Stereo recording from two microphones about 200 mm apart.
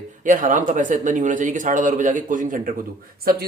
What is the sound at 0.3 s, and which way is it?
Speech, 40° right (ahead or behind).